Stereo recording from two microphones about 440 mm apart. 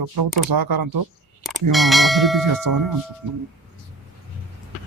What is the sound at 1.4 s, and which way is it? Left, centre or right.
Speech, centre.